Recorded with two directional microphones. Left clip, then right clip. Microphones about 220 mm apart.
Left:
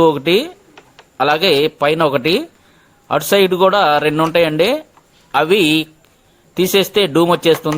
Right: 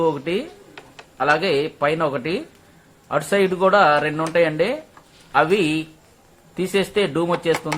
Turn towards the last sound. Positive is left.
turn(degrees=45)  # may be behind; listen again after turning